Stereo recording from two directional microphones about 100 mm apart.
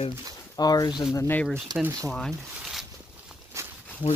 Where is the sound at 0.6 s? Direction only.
40° left (ahead or behind).